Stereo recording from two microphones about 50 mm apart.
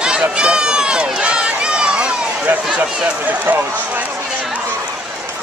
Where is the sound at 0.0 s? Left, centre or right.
Centre.